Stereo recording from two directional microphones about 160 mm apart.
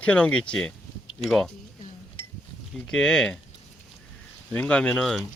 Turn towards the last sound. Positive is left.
turn(degrees=5)  # may be behind; listen again after turning